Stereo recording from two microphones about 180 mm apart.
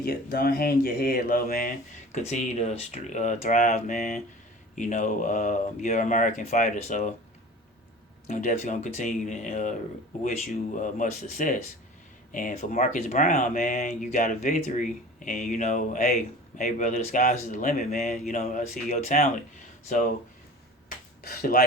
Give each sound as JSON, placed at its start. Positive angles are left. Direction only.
{"t": 0.0, "sound": "speech", "side_deg": 60}
{"t": 2.1, "sound": "speech", "side_deg": 40}
{"t": 8.3, "sound": "speech", "side_deg": 40}